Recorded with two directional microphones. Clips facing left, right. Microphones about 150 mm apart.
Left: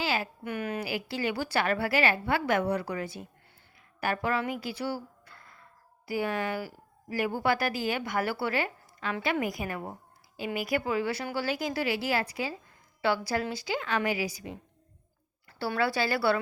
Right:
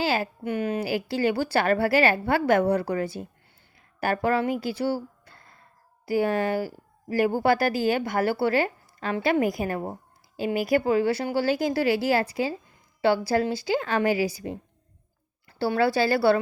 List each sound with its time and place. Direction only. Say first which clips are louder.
0.0 s a woman's voice: right 5 dB; 35° right (ahead or behind)